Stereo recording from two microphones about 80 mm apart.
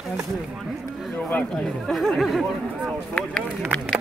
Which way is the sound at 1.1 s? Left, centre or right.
Left.